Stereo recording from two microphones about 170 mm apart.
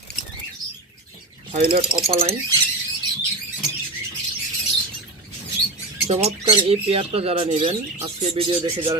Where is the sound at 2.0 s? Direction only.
35° right (ahead or behind).